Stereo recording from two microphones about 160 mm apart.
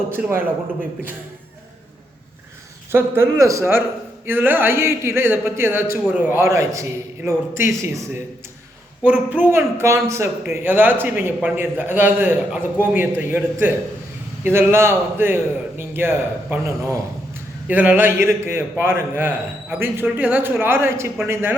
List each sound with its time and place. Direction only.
0.1 s speech: 15° right (ahead or behind)
2.9 s speech: 15° right (ahead or behind)